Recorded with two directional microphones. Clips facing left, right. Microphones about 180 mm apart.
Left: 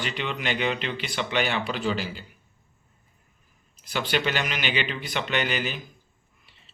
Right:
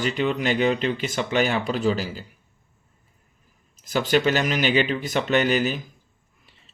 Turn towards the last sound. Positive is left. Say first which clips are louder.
# right 7 dB
turn(degrees=-45)  # may be behind; listen again after turning